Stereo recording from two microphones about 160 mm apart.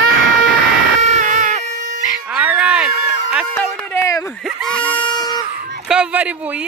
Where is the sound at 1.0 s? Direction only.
50° right (ahead or behind).